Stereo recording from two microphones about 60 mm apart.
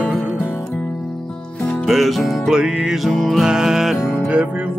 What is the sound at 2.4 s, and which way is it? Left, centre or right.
Music, centre.